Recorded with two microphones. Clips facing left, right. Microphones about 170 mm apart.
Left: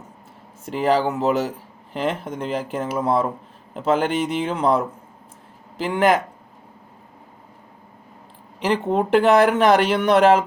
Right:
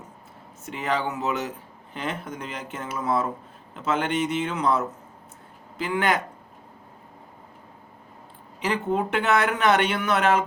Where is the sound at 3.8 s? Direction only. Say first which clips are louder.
Left 6 dB; 35° left (ahead or behind).